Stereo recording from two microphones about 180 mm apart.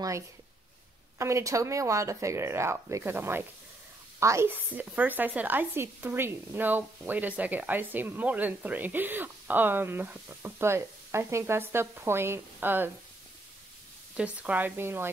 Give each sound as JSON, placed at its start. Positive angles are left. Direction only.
{"t": 1.1, "sound": "speech", "side_deg": -15}
{"t": 14.1, "sound": "speech", "side_deg": -5}